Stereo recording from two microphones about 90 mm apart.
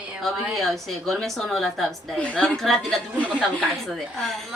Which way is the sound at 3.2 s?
15° left (ahead or behind).